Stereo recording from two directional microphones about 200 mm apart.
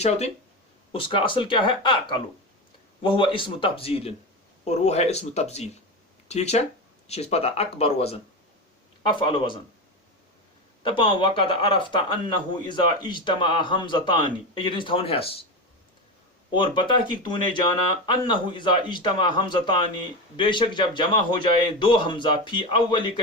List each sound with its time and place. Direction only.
0.0 s speech: 30° left (ahead or behind)
10.8 s speech: 25° left (ahead or behind)
16.5 s speech: 25° left (ahead or behind)